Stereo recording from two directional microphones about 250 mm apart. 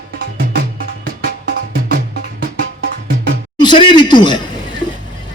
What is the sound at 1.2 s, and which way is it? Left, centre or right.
Music, right.